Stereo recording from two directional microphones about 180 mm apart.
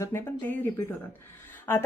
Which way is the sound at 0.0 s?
15° left (ahead or behind).